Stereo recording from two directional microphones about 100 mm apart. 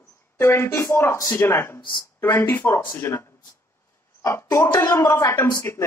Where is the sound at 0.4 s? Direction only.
25° left (ahead or behind).